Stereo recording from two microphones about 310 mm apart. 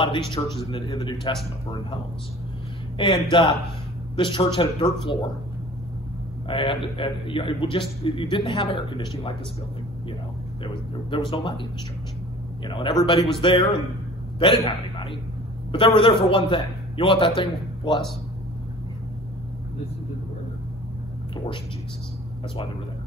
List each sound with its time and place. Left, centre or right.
0.0 s a man's voice: centre
3.0 s a man's voice: centre
6.4 s a man's voice: centre
10.6 s a sound: centre
12.6 s a man's voice: centre